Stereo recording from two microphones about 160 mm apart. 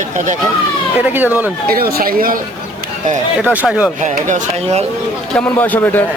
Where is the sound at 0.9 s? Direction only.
10° right (ahead or behind).